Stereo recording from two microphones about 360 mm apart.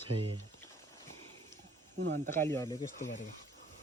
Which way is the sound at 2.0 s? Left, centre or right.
Right.